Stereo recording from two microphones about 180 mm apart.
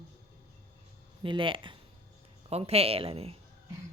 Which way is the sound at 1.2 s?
30° right (ahead or behind).